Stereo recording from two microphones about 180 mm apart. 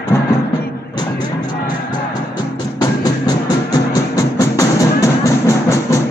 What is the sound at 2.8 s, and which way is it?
Music, 20° left (ahead or behind).